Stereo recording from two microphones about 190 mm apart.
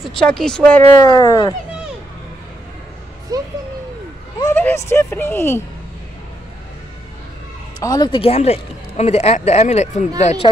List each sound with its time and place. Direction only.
0.0 s speech: 5° left (ahead or behind)
0.8 s speech: 20° left (ahead or behind)
3.3 s a sound: 20° right (ahead or behind)
4.4 s speech: 15° left (ahead or behind)
7.8 s speech: 20° left (ahead or behind)